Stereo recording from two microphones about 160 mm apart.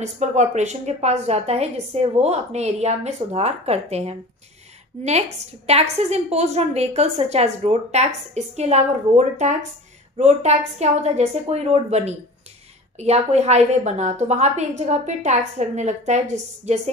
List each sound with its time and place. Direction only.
0.0 s a woman's voice: 45° right (ahead or behind)